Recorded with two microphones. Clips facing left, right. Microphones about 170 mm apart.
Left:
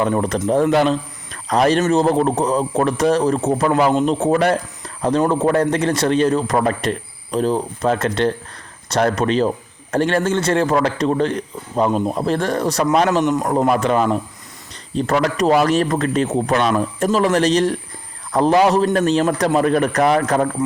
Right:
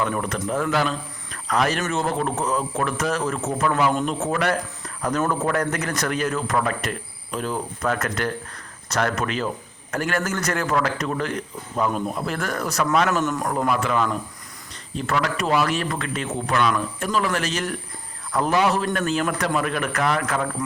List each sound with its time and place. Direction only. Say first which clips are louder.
0.0 s a man's voice: left 7 dB; 35° left (ahead or behind)
13.2 s speech: left 7 dB; 20° left (ahead or behind)
13.7 s a man's voice: left 5 dB; 35° left (ahead or behind)